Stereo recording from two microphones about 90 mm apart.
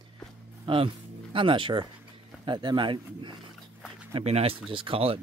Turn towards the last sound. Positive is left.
turn(degrees=-90)